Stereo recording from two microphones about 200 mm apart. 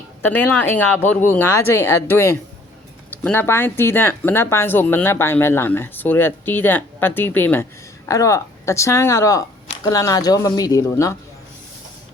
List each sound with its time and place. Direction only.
0.2 s speech: 10° left (ahead or behind)